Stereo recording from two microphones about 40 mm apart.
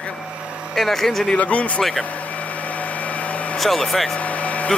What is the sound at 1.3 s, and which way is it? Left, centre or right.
Speech, left.